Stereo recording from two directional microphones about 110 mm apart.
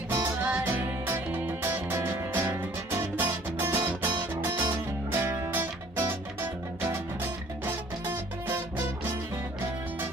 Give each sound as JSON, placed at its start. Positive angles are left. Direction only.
{"t": 0.1, "sound": "music", "side_deg": -20}